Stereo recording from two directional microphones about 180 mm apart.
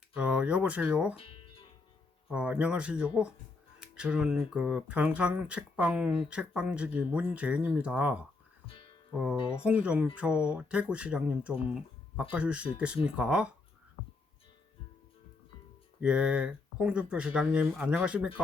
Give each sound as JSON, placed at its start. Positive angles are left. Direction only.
{"t": 0.2, "sound": "speech", "side_deg": -5}
{"t": 1.1, "sound": "guitar", "side_deg": 30}
{"t": 2.3, "sound": "speech", "side_deg": -5}
{"t": 8.6, "sound": "music", "side_deg": 30}
{"t": 9.1, "sound": "speech", "side_deg": -5}
{"t": 16.0, "sound": "speech", "side_deg": -5}